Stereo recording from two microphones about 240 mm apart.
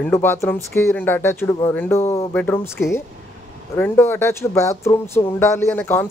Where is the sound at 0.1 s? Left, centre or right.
Centre.